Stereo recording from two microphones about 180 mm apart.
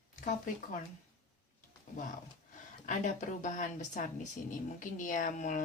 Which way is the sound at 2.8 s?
45° left (ahead or behind).